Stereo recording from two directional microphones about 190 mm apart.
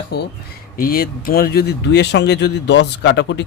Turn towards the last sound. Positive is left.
turn(degrees=65)  # may be behind; listen again after turning